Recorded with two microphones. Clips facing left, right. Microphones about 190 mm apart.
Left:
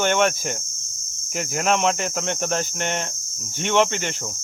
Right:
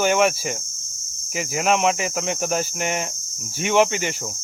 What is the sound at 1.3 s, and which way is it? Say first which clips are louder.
Speech: right 1 dB; 5° right (ahead or behind).